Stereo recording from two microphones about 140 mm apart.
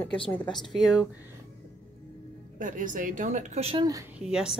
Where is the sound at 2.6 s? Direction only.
70° right (ahead or behind).